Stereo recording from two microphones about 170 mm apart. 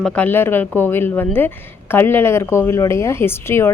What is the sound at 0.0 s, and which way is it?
Speech, 10° left (ahead or behind).